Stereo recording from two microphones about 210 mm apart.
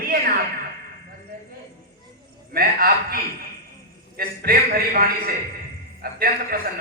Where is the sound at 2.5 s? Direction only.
45° right (ahead or behind).